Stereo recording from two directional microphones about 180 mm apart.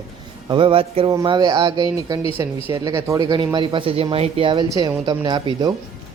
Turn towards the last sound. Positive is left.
turn(degrees=-25)  # may be behind; listen again after turning